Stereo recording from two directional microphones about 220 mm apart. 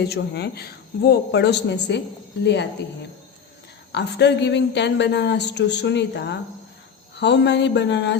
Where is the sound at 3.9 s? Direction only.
50° left (ahead or behind).